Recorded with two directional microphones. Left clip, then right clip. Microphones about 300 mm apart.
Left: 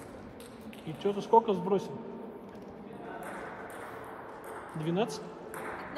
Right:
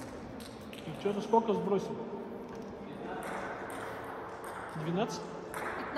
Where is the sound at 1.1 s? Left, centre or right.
Left.